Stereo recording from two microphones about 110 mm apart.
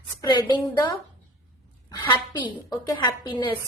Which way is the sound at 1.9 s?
40° left (ahead or behind).